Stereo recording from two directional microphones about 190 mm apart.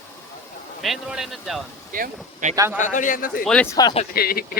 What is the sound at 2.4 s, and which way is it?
Speech, 45° right (ahead or behind).